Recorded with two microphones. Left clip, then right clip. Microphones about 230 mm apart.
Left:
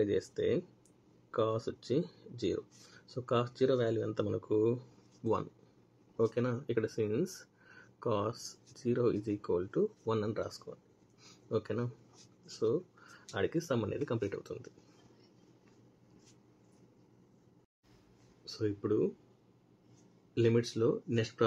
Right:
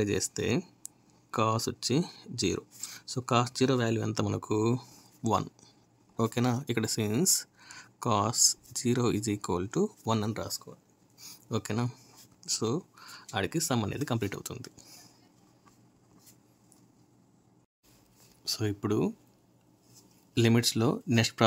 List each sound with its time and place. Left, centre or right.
0.0 s speech: right
11.5 s speech: right
18.4 s speech: right
20.3 s speech: right